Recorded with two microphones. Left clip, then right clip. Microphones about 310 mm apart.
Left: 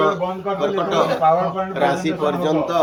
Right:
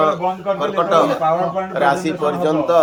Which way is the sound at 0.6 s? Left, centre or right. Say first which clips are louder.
Right 4 dB; right.